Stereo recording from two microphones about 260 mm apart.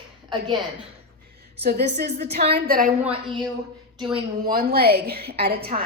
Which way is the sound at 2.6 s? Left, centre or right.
Right.